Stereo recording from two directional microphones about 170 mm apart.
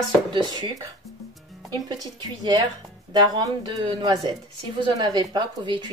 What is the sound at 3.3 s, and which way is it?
Speech, 30° right (ahead or behind).